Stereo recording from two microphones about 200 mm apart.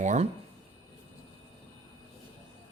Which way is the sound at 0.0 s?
35° right (ahead or behind).